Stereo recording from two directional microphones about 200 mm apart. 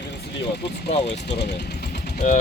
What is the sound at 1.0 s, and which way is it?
Speech, 60° left (ahead or behind).